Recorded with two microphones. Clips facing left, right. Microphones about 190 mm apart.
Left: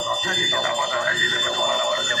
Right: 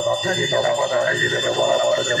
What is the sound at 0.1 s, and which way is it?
Jingle bell, 35° right (ahead or behind).